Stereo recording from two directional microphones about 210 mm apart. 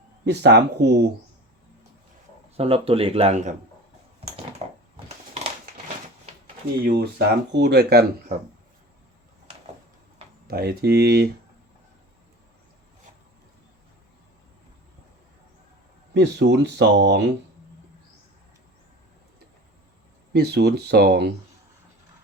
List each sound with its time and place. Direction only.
0.3 s speech: 55° right (ahead or behind)
2.6 s speech: 25° right (ahead or behind)
4.6 s a sound: 30° right (ahead or behind)
6.8 s speech: 50° right (ahead or behind)
10.4 s speech: 45° right (ahead or behind)
16.1 s speech: 55° right (ahead or behind)
20.3 s speech: 50° right (ahead or behind)